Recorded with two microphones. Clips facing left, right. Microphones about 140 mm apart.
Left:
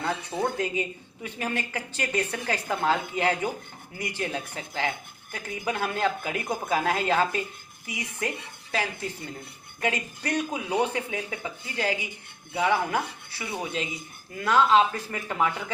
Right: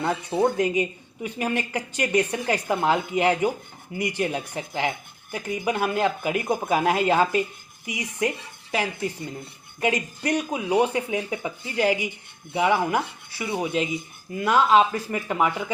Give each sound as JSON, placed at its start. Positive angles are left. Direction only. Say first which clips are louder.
{"t": 0.0, "sound": "speech", "louder": "right 6 dB", "side_deg": -15}